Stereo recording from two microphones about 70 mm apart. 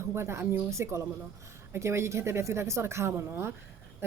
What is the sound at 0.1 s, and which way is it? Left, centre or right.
A woman's voice, right.